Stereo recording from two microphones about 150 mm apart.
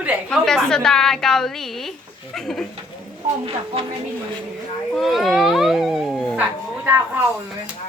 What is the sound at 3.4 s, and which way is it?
Speech, 40° right (ahead or behind).